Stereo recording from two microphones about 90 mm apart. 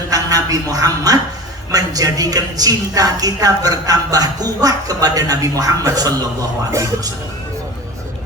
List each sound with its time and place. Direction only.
0.1 s a man's voice: 45° right (ahead or behind)